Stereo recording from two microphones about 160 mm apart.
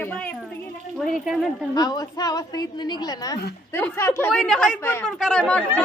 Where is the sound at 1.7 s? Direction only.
25° left (ahead or behind).